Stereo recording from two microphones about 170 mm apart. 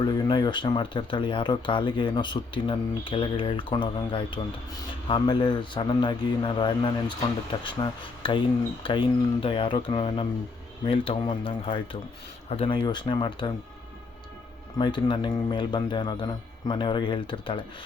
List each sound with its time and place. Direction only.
0.0 s speech: 25° left (ahead or behind)
14.8 s speech: 25° left (ahead or behind)